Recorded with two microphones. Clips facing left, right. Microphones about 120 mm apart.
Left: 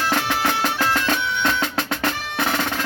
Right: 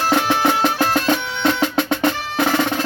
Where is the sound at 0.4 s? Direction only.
20° right (ahead or behind).